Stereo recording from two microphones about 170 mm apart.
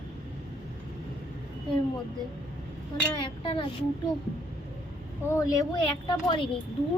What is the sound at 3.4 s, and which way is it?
Speech, 30° left (ahead or behind).